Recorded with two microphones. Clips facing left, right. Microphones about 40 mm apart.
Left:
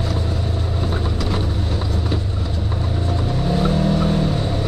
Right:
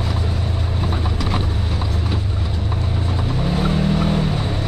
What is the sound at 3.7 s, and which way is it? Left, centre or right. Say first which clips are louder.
Vehicle: even; right.